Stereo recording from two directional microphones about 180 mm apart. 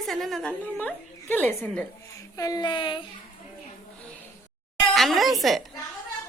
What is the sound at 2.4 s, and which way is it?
Speech, 20° left (ahead or behind).